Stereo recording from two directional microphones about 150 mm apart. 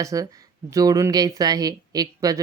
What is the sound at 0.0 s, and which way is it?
Speech, 20° right (ahead or behind).